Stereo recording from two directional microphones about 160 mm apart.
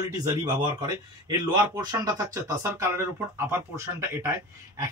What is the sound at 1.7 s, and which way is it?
A man's voice, 25° right (ahead or behind).